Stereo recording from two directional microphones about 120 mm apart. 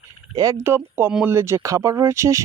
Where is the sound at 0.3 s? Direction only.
25° right (ahead or behind).